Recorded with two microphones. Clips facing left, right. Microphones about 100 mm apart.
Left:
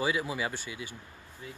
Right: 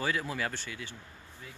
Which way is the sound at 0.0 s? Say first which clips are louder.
Left 2 dB; 10° left (ahead or behind).